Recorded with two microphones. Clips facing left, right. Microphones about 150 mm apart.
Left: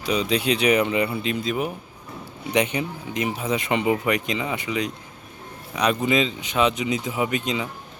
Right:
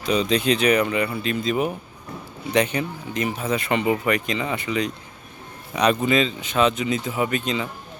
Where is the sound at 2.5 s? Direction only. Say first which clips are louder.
Right 1 dB; 15° left (ahead or behind).